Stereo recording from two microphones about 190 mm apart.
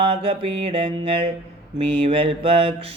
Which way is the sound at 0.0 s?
30° right (ahead or behind).